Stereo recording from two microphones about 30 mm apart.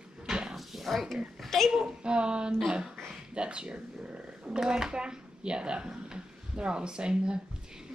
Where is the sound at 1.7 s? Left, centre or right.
Centre.